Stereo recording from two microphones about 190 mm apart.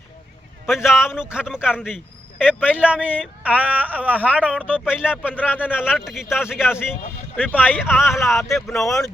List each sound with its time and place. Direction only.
0.7 s speech: centre (ahead or behind)
5.2 s speech: 10° left (ahead or behind)
6.1 s speech: 5° right (ahead or behind)
7.3 s speech: 10° left (ahead or behind)
7.6 s speech: 5° right (ahead or behind)